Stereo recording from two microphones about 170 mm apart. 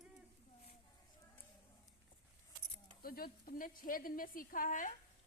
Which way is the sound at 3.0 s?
60° left (ahead or behind).